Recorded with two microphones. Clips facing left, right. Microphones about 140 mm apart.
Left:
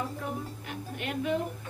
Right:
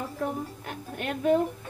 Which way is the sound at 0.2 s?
45° right (ahead or behind).